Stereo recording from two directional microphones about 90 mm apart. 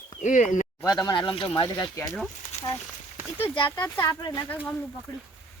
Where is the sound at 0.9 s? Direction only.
45° left (ahead or behind).